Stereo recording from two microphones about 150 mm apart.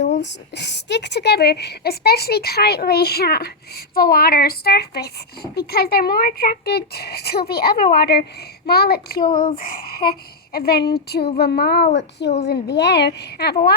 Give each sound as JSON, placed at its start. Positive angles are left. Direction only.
{"t": 1.2, "sound": "speech", "side_deg": 90}
{"t": 11.9, "sound": "speech", "side_deg": 50}
{"t": 12.5, "sound": "speech", "side_deg": 90}